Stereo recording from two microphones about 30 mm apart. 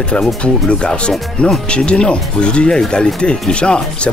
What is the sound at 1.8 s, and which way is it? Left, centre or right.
Speech, left.